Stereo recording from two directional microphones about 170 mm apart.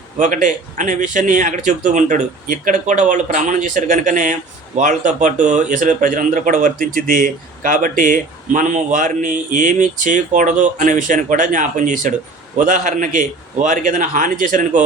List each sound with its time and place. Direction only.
0.2 s speech: 50° right (ahead or behind)